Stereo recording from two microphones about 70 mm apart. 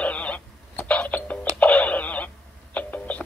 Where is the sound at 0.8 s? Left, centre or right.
Centre.